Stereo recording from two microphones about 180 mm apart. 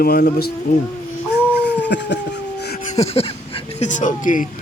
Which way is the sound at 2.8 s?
35° left (ahead or behind).